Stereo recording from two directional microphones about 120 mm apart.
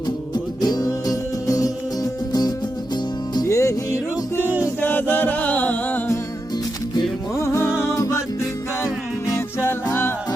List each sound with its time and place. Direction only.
0.3 s music: 35° left (ahead or behind)
3.3 s music: 25° left (ahead or behind)
4.8 s music: 15° left (ahead or behind)
7.3 s music: 25° left (ahead or behind)